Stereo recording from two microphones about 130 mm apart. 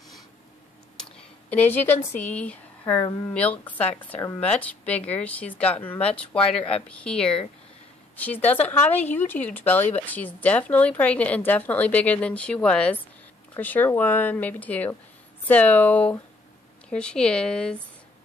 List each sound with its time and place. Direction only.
1.5 s speech: 15° left (ahead or behind)
2.8 s speech: 30° left (ahead or behind)
3.3 s speech: 10° left (ahead or behind)